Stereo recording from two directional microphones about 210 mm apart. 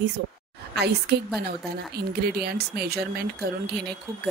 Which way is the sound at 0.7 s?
50° right (ahead or behind).